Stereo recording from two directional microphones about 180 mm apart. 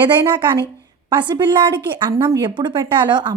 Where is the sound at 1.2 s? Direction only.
25° right (ahead or behind).